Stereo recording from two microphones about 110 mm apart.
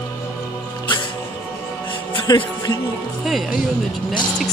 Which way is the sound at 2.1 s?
40° left (ahead or behind).